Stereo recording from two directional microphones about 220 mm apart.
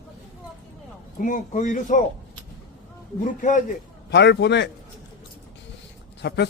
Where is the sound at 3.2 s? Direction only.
35° left (ahead or behind).